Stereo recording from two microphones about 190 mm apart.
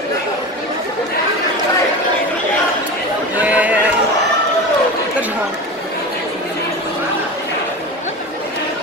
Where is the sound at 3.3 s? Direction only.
5° right (ahead or behind).